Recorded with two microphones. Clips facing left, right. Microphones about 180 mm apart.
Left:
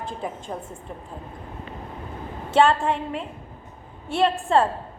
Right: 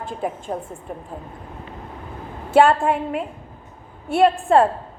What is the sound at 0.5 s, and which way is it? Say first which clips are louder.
Speech: right 5 dB; 40° right (ahead or behind).